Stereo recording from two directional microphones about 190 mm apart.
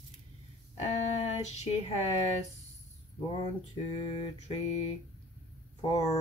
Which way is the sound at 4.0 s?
30° left (ahead or behind).